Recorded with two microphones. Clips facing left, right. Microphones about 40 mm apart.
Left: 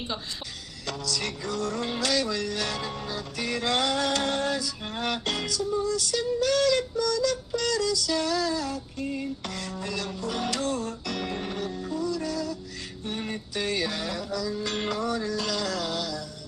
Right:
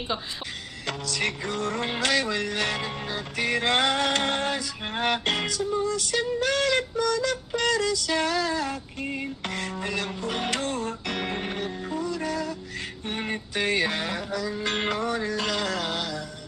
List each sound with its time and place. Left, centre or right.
0.8 s music: right